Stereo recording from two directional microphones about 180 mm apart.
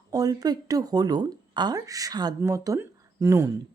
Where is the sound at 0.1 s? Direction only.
20° right (ahead or behind).